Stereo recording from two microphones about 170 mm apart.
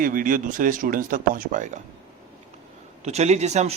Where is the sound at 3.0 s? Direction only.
40° right (ahead or behind).